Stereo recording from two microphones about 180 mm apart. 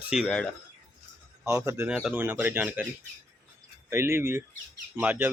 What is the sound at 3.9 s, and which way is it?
Speech, 15° right (ahead or behind).